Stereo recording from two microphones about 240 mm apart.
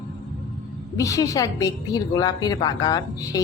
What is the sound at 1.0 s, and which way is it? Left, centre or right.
A woman's voice, centre.